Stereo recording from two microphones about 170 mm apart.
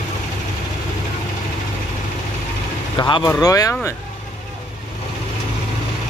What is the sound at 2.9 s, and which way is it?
Speech, 25° left (ahead or behind).